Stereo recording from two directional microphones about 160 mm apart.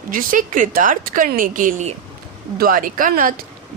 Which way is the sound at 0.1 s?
60° right (ahead or behind).